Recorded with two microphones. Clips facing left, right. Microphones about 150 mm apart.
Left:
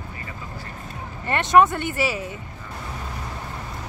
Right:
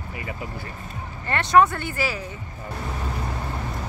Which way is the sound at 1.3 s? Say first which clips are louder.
Left 1 dB; 20° left (ahead or behind).